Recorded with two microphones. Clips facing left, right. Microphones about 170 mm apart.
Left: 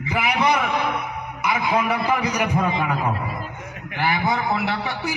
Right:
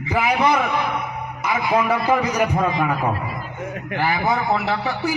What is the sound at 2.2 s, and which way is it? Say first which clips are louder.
Speech: right 2 dB; 45° right (ahead or behind).